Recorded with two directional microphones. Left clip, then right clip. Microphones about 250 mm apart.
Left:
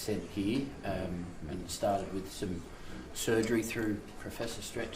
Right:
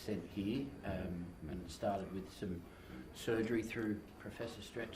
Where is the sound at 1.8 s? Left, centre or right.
Left.